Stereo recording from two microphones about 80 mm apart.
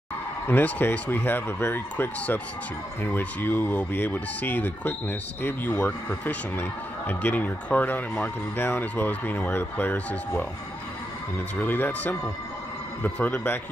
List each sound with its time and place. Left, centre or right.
0.5 s speech: left